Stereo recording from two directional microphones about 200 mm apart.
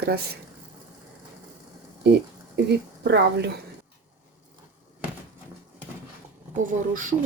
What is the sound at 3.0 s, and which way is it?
Speech, 60° right (ahead or behind).